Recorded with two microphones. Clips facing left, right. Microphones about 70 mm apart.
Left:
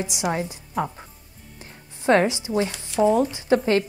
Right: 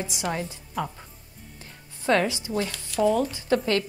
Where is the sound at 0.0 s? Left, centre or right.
Centre.